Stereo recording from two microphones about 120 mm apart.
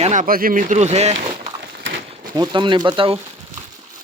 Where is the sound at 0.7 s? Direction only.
65° right (ahead or behind).